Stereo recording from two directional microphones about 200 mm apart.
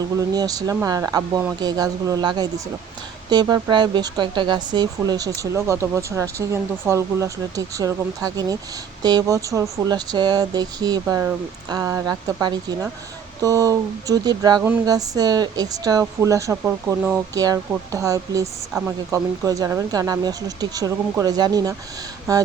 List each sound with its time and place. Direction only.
0.0 s speech: 20° right (ahead or behind)